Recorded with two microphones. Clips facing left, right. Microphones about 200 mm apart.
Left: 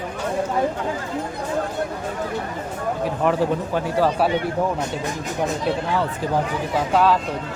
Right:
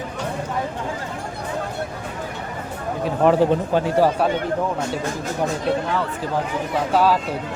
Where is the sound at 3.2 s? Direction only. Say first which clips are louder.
Right 5 dB; 35° right (ahead or behind).